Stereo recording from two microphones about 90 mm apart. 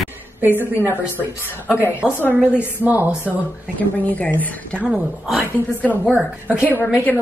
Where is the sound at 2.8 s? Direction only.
20° right (ahead or behind).